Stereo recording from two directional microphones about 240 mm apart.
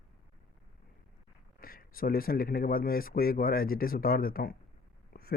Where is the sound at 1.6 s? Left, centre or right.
Left.